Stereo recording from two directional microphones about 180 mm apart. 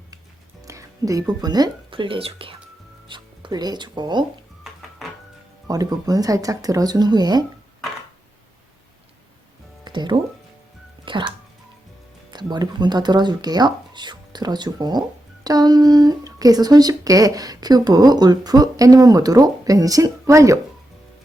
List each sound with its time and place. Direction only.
0.6 s speech: 20° right (ahead or behind)
5.6 s speech: 20° right (ahead or behind)
9.8 s music: 25° right (ahead or behind)
12.3 s speech: 25° right (ahead or behind)